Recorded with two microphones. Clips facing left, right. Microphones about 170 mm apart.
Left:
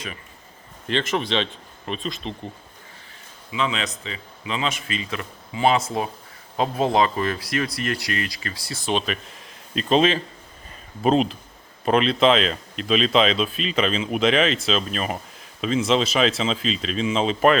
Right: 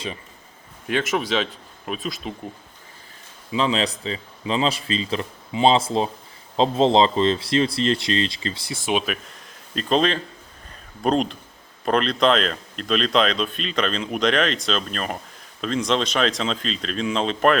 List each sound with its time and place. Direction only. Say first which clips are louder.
0.9 s speech: right 1 dB; 5° right (ahead or behind)
3.5 s speech: right 4 dB; 35° right (ahead or behind)
8.7 s speech: even; 10° right (ahead or behind)
9.3 s speech: left 2 dB; centre (ahead or behind)